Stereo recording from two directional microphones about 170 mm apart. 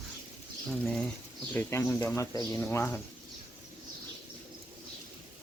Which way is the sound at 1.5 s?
15° left (ahead or behind).